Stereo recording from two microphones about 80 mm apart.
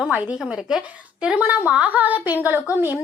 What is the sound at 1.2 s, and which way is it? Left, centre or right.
A woman's voice, centre.